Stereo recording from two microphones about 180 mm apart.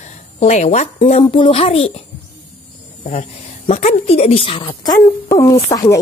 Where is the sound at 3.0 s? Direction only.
35° left (ahead or behind).